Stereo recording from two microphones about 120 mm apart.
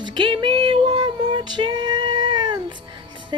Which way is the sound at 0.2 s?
40° right (ahead or behind).